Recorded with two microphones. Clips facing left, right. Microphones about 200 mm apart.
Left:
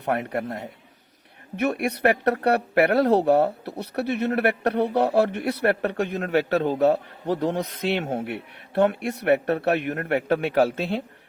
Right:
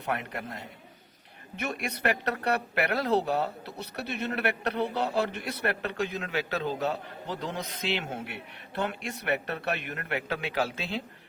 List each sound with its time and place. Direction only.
0.0 s speech: 55° left (ahead or behind)